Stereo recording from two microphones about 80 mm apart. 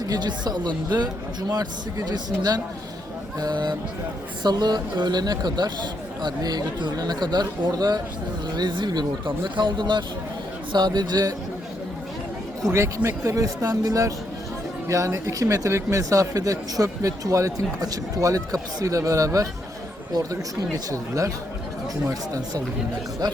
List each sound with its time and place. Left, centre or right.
0.0 s speech: right
8.5 s speech: right
10.7 s speech: right
13.0 s speech: right
23.2 s speech: right